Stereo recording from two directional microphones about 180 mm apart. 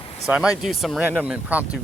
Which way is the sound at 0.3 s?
5° right (ahead or behind).